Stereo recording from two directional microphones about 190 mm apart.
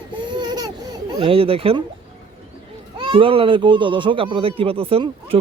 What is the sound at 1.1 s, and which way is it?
Speech, 30° right (ahead or behind).